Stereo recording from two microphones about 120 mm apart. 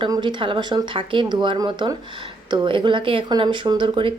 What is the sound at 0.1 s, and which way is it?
A woman's voice, 40° right (ahead or behind).